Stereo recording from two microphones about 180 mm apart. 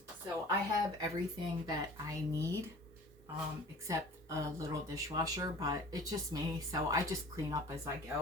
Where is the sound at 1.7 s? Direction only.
20° right (ahead or behind).